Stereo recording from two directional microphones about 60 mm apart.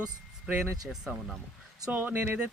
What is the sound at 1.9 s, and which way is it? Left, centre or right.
Speech, right.